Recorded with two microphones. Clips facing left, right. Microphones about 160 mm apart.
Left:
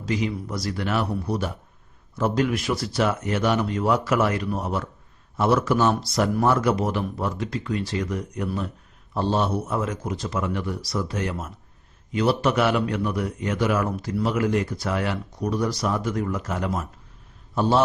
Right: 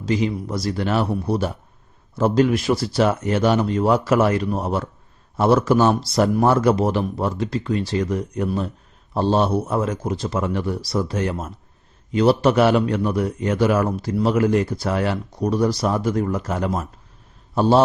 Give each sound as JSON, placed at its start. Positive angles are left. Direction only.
{"t": 0.0, "sound": "a man's voice", "side_deg": -30}